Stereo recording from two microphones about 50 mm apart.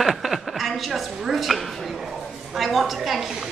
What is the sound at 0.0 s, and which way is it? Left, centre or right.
A woman's voice, centre.